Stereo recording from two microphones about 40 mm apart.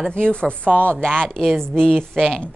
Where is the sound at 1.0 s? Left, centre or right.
Centre.